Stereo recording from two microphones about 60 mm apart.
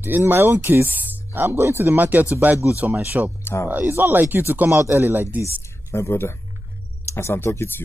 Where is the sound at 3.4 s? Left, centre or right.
Left.